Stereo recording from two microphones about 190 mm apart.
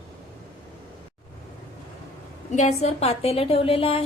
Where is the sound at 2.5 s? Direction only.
35° left (ahead or behind).